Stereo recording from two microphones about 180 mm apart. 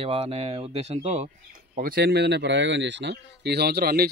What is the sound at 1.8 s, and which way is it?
Speech, 60° right (ahead or behind).